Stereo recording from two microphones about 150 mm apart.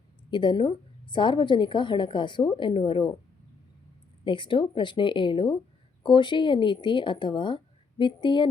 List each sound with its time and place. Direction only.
0.3 s a woman's voice: 30° left (ahead or behind)
4.2 s a woman's voice: 35° left (ahead or behind)